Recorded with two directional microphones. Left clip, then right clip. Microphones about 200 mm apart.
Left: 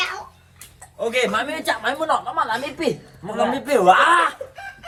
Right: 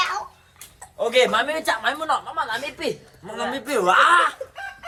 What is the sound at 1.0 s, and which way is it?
Speech, 50° right (ahead or behind).